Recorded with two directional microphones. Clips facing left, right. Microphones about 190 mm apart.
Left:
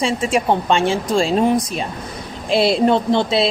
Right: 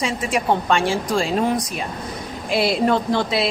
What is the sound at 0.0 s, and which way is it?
Speech, 25° left (ahead or behind).